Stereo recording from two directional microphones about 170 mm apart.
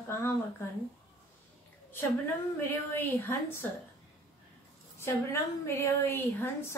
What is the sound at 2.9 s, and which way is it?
Speech, 15° left (ahead or behind).